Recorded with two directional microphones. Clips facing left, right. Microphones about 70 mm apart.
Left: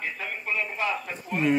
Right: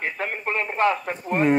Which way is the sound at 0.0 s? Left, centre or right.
Right.